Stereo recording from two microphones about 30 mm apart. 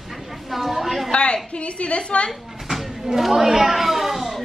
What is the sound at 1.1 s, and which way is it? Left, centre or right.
A woman's voice, left.